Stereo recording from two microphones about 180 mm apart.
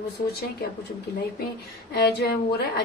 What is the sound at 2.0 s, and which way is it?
Speech, 65° left (ahead or behind).